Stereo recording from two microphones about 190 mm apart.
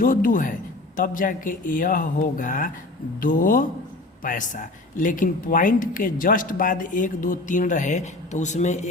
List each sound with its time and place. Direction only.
0.0 s speech: 45° left (ahead or behind)